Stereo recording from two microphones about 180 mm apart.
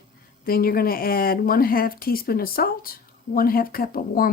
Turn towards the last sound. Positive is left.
turn(degrees=55)  # may be behind; listen again after turning